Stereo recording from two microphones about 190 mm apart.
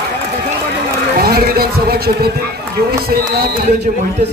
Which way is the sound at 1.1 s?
50° right (ahead or behind).